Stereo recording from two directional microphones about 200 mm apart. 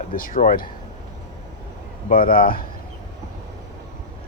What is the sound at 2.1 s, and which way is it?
Speech, 45° left (ahead or behind).